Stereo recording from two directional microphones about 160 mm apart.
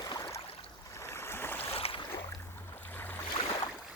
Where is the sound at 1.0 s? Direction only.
15° left (ahead or behind).